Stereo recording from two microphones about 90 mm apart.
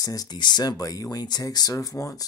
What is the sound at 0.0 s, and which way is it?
Speech, 45° left (ahead or behind).